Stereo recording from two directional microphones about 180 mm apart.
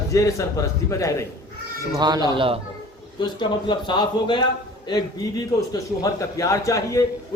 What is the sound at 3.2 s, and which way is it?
A man's voice, 25° left (ahead or behind).